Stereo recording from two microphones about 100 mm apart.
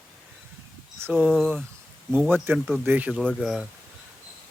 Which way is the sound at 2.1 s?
20° right (ahead or behind).